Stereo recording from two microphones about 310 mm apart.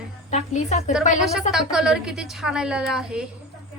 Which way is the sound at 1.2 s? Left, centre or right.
Centre.